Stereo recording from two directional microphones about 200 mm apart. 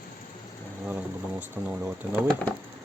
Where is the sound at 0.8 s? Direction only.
10° right (ahead or behind).